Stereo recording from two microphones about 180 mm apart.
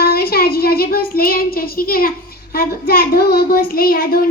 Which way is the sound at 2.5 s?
55° left (ahead or behind).